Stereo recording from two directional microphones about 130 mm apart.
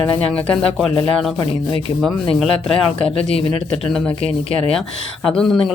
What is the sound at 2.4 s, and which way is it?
Speech, 5° left (ahead or behind).